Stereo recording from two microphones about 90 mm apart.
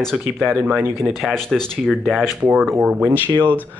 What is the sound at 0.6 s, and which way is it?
Speech, 20° right (ahead or behind).